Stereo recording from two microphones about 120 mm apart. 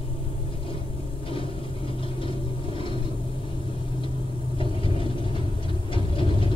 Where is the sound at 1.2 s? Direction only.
45° left (ahead or behind).